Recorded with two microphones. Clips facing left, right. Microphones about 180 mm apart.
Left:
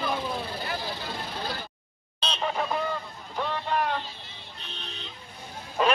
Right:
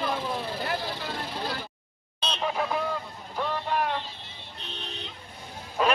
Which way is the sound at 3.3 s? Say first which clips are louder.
Even; 5° right (ahead or behind).